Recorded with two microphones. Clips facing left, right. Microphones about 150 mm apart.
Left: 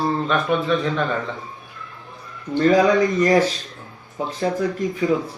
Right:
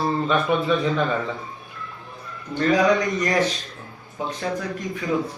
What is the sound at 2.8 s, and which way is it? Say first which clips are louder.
Speech: left 3 dB; 30° left (ahead or behind).